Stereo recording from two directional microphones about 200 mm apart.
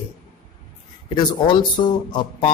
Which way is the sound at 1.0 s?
20° left (ahead or behind).